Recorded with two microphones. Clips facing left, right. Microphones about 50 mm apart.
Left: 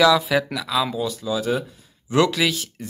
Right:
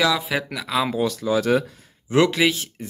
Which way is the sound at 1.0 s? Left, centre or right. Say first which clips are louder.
Right 3 dB; right.